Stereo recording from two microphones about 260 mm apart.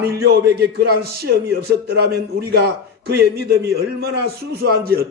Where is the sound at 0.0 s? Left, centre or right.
Right.